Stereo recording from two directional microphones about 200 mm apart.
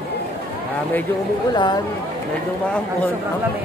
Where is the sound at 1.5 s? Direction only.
20° left (ahead or behind).